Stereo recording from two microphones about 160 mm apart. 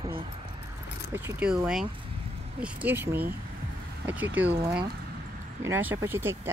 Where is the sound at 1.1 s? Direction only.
10° right (ahead or behind).